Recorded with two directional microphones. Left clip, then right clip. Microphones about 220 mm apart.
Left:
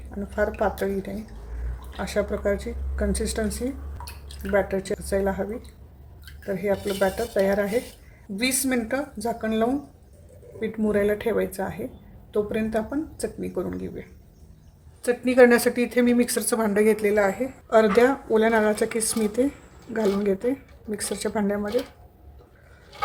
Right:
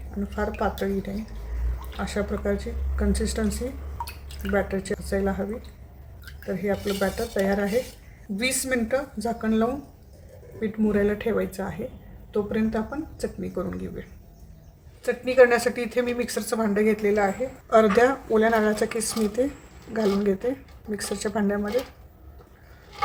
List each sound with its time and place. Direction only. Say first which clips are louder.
0.3 s speech: left 3 dB; 20° left (ahead or behind)
4.5 s speech: left 3 dB; 20° left (ahead or behind)
6.5 s speech: left 2 dB; 20° left (ahead or behind)
15.0 s speech: left 1 dB; 20° left (ahead or behind)
17.7 s speech: even; 10° left (ahead or behind)